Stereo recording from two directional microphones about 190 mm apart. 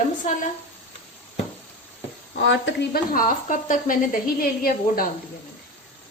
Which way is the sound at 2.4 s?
70° left (ahead or behind).